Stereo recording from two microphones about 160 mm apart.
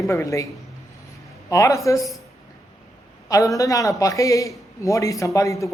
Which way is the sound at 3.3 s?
20° left (ahead or behind).